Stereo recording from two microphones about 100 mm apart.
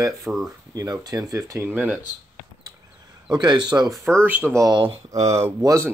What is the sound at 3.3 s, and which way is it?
Speech, 45° right (ahead or behind).